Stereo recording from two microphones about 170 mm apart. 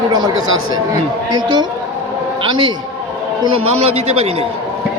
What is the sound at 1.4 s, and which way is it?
Speech, 25° right (ahead or behind).